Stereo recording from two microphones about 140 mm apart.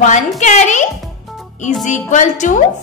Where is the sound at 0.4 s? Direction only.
55° left (ahead or behind).